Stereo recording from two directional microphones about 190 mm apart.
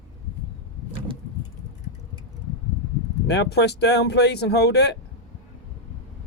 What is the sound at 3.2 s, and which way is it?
Speech, 65° left (ahead or behind).